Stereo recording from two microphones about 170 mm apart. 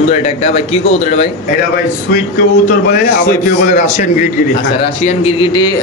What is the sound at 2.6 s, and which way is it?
A man's voice, 55° left (ahead or behind).